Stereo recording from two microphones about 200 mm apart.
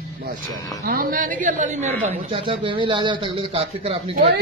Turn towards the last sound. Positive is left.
turn(degrees=-30)  # may be behind; listen again after turning